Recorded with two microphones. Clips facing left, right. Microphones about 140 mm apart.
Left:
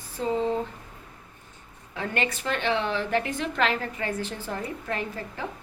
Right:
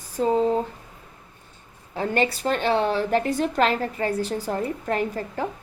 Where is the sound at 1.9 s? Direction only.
35° right (ahead or behind).